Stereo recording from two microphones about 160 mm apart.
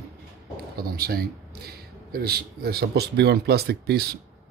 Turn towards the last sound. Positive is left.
turn(degrees=-80)